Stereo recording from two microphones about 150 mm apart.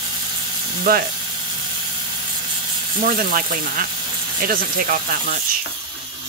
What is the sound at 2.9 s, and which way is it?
Speech, 70° right (ahead or behind).